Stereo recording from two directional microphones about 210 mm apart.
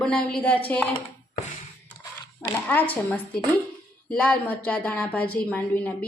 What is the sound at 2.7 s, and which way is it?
A woman's voice, 10° left (ahead or behind).